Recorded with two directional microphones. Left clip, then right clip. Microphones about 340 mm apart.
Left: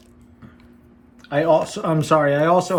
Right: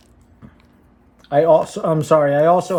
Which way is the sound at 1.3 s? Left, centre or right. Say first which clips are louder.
Right 4 dB; centre.